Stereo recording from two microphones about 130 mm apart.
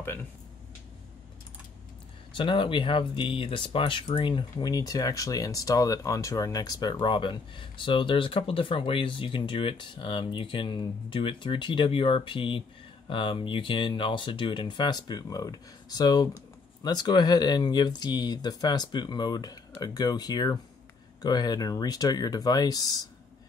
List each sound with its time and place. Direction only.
2.3 s speech: 40° left (ahead or behind)